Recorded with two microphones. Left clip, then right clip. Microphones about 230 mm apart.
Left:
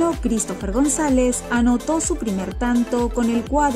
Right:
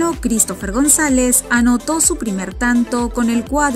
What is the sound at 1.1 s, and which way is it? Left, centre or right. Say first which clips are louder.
Speech: right 4 dB; right.